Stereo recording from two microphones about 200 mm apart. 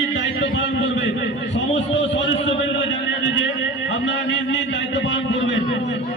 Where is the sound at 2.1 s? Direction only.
65° left (ahead or behind).